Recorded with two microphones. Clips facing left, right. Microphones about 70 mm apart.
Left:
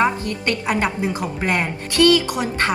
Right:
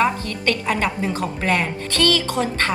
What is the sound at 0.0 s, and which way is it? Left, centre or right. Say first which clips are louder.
A woman's voice: even; left.